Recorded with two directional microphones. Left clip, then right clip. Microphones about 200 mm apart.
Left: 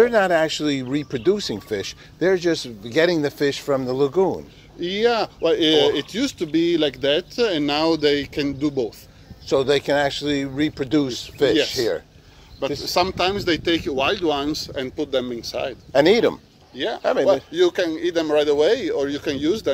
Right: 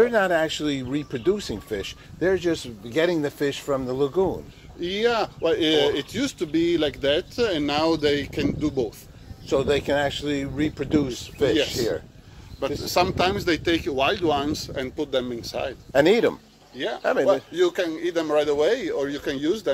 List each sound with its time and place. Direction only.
0.0 s speech: 20° left (ahead or behind)
4.7 s speech: 50° left (ahead or behind)
9.5 s speech: 25° left (ahead or behind)
11.5 s speech: 45° left (ahead or behind)
12.5 s speech: 30° left (ahead or behind); by 15.7 s 50° left (ahead or behind)
15.9 s speech: 10° left (ahead or behind)
16.7 s a man's voice: 60° left (ahead or behind)
17.0 s speech: 10° left (ahead or behind)
17.3 s a man's voice: 60° left (ahead or behind)
19.1 s speech: 50° left (ahead or behind)